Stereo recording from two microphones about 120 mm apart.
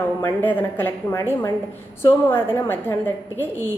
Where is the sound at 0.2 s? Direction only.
15° left (ahead or behind).